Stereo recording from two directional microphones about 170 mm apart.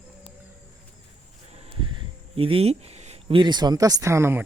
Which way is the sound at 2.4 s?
30° right (ahead or behind).